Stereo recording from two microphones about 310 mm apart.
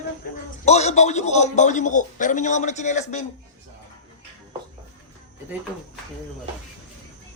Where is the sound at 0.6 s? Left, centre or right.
Left.